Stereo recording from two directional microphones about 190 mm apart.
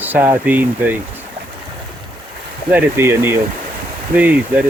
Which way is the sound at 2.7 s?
15° right (ahead or behind).